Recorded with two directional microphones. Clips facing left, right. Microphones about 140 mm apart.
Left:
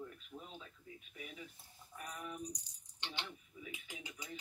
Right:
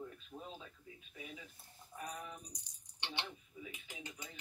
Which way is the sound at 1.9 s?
20° right (ahead or behind).